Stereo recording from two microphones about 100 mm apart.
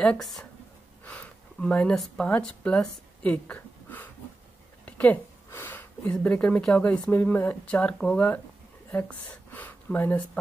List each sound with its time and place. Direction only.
0.0 s speech: 5° left (ahead or behind)
4.8 s a sound: 15° left (ahead or behind)
6.1 s speech: 15° left (ahead or behind)